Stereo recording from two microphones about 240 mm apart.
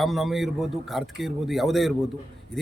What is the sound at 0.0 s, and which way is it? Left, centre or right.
A man's voice, centre.